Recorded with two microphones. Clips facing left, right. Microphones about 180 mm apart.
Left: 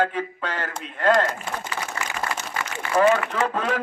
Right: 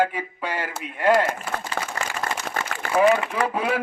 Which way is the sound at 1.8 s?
60° right (ahead or behind).